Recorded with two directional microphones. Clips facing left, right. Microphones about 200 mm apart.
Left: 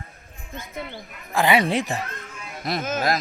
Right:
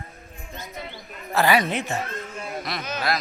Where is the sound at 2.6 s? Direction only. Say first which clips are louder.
Left 6 dB; 45° left (ahead or behind).